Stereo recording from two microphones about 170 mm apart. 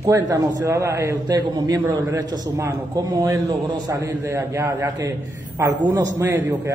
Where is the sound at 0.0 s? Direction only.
20° right (ahead or behind).